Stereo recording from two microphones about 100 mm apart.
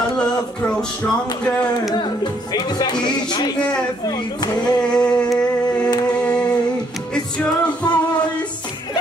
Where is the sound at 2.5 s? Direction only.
45° left (ahead or behind).